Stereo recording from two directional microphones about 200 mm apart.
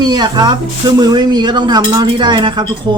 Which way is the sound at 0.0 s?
20° right (ahead or behind).